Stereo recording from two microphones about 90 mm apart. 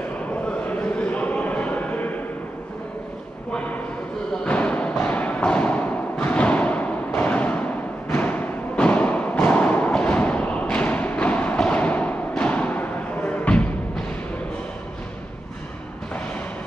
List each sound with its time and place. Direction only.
0.5 s a sound: 20° left (ahead or behind)
4.5 s music: 15° left (ahead or behind)
4.9 s thump: 15° left (ahead or behind)
7.2 s timpani: 15° left (ahead or behind)
8.1 s music: 15° left (ahead or behind)